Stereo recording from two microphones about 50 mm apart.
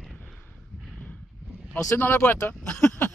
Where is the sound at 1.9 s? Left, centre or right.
Left.